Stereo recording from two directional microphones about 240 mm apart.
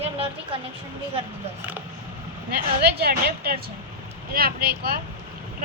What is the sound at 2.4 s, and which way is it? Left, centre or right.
A woman's voice, right.